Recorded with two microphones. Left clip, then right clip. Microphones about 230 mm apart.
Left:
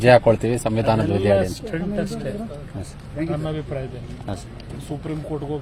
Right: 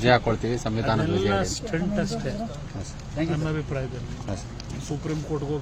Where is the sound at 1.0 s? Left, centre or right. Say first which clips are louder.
Left 6 dB; centre.